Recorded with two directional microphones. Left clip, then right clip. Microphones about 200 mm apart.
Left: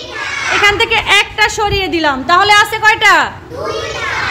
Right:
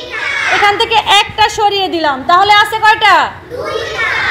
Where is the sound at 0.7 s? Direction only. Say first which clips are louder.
Left 1 dB; 10° left (ahead or behind).